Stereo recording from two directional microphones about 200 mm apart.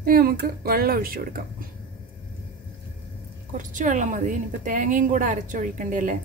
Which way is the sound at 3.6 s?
40° right (ahead or behind).